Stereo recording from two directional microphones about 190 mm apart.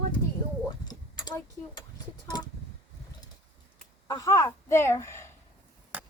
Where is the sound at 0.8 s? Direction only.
20° left (ahead or behind).